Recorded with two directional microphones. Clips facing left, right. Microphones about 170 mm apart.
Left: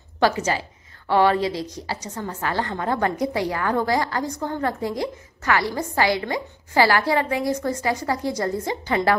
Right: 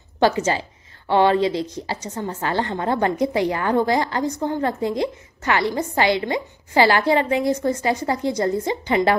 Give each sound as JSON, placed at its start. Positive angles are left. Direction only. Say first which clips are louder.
{"t": 0.2, "sound": "a woman's voice", "louder": "right 2 dB", "side_deg": -25}